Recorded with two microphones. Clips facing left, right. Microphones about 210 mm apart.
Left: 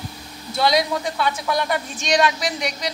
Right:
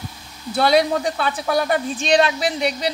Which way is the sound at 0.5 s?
30° right (ahead or behind).